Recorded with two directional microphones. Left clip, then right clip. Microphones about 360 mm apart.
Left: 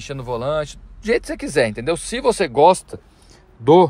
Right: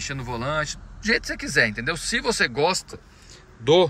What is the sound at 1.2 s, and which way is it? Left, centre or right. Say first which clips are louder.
Speech: left 2 dB; centre.